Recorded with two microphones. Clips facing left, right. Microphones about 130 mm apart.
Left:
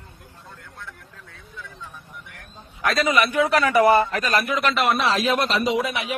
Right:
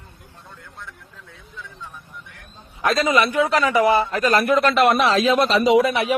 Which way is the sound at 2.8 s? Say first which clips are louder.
Right 2 dB; 25° right (ahead or behind).